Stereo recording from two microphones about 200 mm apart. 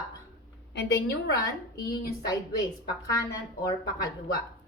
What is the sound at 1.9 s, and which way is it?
Speech, 50° left (ahead or behind).